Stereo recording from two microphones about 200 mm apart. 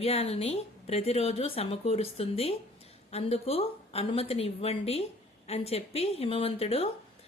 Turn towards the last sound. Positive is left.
turn(degrees=30)  # may be behind; listen again after turning